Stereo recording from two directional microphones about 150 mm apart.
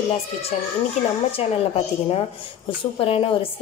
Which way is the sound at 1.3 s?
40° left (ahead or behind).